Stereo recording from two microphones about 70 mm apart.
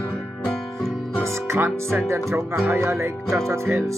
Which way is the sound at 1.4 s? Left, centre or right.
Right.